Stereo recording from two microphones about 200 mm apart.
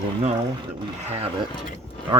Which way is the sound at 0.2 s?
35° right (ahead or behind).